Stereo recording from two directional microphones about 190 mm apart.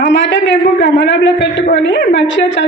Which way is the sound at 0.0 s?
65° left (ahead or behind).